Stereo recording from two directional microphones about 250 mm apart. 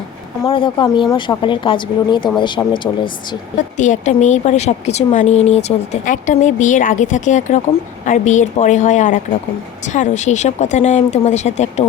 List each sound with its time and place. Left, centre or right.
0.4 s a woman's voice: centre